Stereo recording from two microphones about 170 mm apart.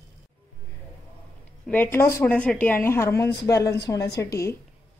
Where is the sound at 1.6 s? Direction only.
10° left (ahead or behind).